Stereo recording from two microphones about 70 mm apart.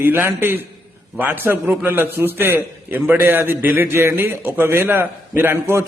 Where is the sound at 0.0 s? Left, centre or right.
Right.